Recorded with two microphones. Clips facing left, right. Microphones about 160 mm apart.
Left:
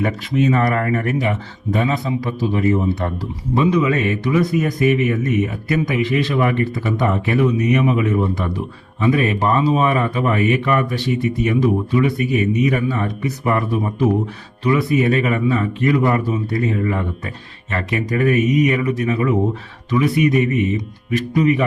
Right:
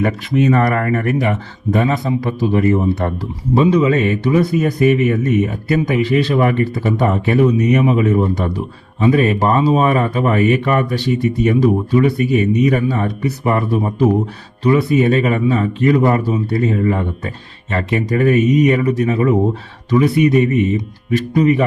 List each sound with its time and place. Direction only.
0.0 s speech: 55° right (ahead or behind)
3.5 s speech: 30° right (ahead or behind)